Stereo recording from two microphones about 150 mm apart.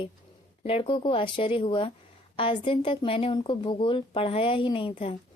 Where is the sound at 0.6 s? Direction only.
40° left (ahead or behind).